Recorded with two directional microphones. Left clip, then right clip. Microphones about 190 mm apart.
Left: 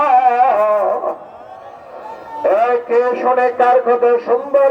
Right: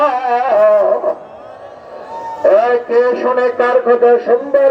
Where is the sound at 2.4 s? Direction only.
25° right (ahead or behind).